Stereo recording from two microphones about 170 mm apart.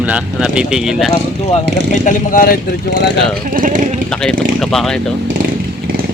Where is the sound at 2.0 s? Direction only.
55° left (ahead or behind).